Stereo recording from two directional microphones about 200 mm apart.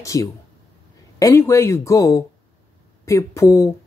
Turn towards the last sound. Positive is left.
turn(degrees=15)  # may be behind; listen again after turning